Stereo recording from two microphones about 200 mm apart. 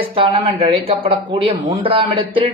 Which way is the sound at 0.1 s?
25° right (ahead or behind).